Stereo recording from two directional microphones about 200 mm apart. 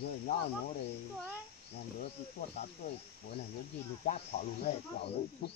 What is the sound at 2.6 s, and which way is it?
Speech, 35° left (ahead or behind).